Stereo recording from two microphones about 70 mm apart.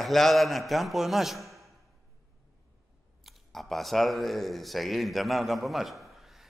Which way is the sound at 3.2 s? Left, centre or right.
Centre.